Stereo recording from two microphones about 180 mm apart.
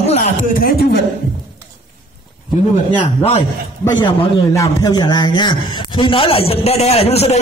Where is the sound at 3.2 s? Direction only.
35° left (ahead or behind).